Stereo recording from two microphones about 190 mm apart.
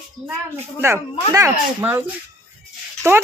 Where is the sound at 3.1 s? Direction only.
15° right (ahead or behind).